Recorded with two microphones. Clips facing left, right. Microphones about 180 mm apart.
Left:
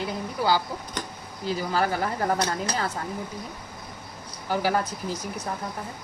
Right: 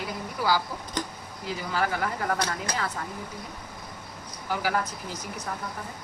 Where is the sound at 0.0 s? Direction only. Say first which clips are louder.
Left 3 dB; 25° left (ahead or behind).